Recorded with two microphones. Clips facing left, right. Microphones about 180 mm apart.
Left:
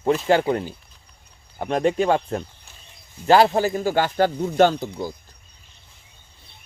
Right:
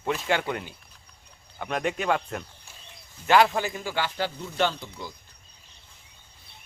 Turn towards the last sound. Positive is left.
turn(degrees=45)  # may be behind; listen again after turning